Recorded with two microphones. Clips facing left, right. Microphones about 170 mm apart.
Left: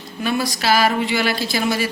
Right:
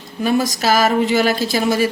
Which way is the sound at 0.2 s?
40° right (ahead or behind).